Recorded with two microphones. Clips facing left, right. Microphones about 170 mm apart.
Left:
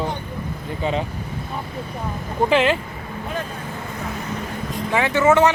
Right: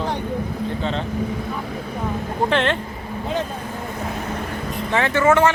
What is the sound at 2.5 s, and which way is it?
Speech, 5° left (ahead or behind).